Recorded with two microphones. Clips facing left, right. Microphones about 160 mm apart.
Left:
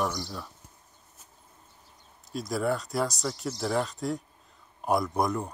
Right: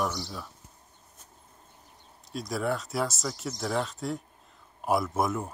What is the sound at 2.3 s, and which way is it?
Speech, centre (ahead or behind).